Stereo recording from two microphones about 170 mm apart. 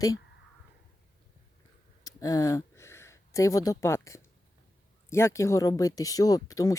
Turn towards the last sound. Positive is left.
turn(degrees=20)  # may be behind; listen again after turning